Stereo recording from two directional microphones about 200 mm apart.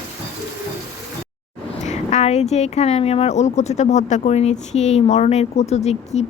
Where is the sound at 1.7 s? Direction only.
35° left (ahead or behind).